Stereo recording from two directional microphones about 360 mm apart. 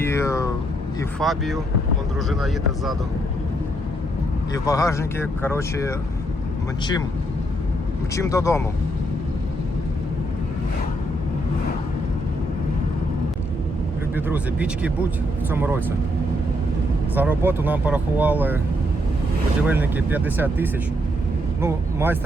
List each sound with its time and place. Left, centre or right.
0.0 s speech: centre
4.5 s speech: centre
8.1 s speech: centre
14.3 s speech: centre
17.2 s speech: centre
19.6 s speech: centre